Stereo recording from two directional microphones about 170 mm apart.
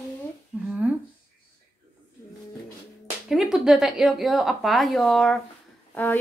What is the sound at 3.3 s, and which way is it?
A woman's voice, centre (ahead or behind).